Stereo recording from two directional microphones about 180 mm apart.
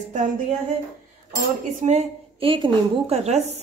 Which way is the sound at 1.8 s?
40° right (ahead or behind).